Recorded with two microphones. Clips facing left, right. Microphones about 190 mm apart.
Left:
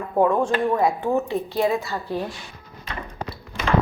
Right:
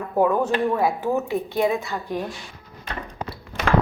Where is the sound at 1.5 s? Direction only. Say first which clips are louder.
Even; 15° right (ahead or behind).